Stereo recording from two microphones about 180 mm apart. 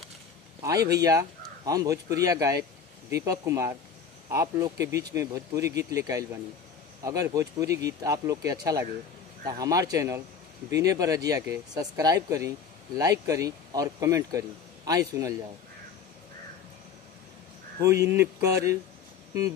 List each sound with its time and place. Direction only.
0.6 s speech: 20° right (ahead or behind)
17.7 s speech: 15° right (ahead or behind)